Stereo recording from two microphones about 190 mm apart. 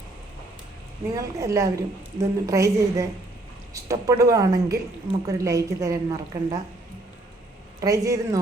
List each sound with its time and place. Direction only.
1.1 s a woman's voice: 15° right (ahead or behind)
7.8 s a woman's voice: 15° right (ahead or behind)